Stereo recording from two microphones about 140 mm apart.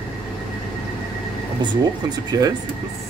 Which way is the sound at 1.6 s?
30° right (ahead or behind).